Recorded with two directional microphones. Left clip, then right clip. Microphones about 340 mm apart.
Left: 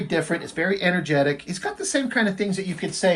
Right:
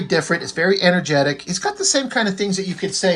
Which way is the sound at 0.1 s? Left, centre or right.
Centre.